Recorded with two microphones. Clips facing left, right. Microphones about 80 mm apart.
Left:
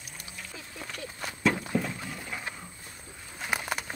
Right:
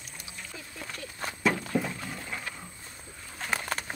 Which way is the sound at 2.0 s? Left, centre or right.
Centre.